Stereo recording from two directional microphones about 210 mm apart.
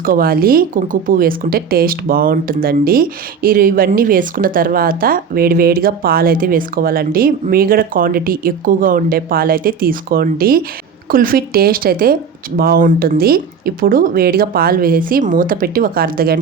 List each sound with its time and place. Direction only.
0.0 s speech: 45° right (ahead or behind)